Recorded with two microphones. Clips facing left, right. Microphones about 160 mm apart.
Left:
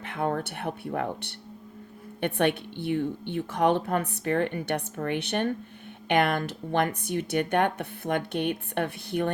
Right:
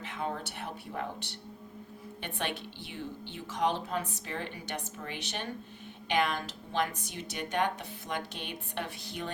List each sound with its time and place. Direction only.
0.0 s speech: 60° left (ahead or behind)